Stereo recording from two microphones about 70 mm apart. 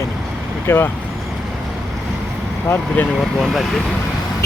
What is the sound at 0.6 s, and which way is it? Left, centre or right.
Speech, left.